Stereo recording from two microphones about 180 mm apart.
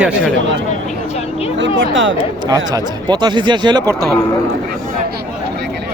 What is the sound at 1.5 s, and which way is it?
Speech, 90° right.